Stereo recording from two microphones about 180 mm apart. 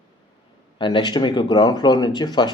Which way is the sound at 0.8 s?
25° left (ahead or behind).